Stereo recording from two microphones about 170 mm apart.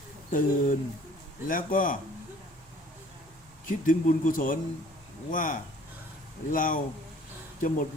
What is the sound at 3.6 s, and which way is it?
A man's voice, 50° left (ahead or behind).